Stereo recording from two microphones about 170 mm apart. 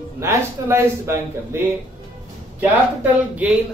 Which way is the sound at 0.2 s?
15° right (ahead or behind).